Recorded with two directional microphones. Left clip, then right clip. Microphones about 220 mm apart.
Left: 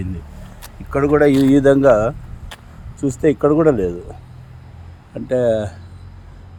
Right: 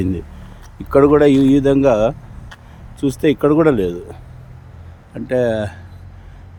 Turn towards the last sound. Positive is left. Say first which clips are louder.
# left 1 dB
turn(degrees=0)  # may be behind; listen again after turning